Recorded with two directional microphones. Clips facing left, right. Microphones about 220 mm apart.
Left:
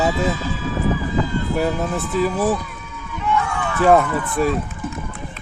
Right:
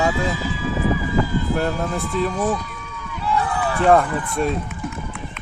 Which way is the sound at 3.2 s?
35° right (ahead or behind).